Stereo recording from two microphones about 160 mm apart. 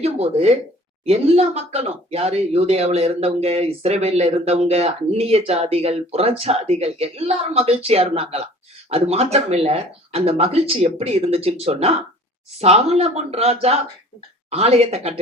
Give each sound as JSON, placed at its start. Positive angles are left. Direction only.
{"t": 0.0, "sound": "speech", "side_deg": -40}